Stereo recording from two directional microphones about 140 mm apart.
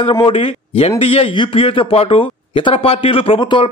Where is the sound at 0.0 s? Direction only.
40° left (ahead or behind).